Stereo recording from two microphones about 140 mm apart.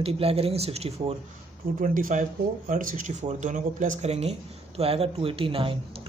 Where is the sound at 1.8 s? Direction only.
70° right (ahead or behind).